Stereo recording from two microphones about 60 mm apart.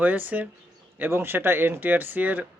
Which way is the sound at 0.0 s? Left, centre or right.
Right.